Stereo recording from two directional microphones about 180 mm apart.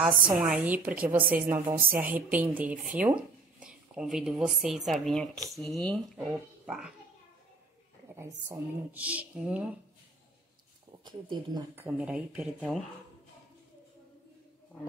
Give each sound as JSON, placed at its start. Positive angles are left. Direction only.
{"t": 0.0, "sound": "a woman's voice", "side_deg": -5}
{"t": 6.6, "sound": "a child's voice", "side_deg": -5}
{"t": 8.2, "sound": "a woman's voice", "side_deg": -10}
{"t": 11.1, "sound": "speech", "side_deg": -25}
{"t": 11.7, "sound": "a woman's voice", "side_deg": -10}